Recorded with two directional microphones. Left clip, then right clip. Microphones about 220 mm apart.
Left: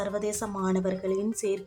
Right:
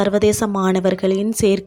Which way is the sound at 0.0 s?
35° right (ahead or behind).